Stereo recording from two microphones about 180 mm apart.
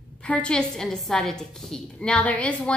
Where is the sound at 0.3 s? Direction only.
5° left (ahead or behind).